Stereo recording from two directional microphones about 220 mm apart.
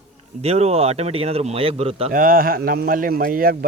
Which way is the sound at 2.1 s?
40° right (ahead or behind).